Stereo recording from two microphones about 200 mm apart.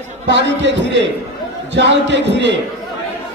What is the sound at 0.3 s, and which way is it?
A man's voice, 60° right (ahead or behind).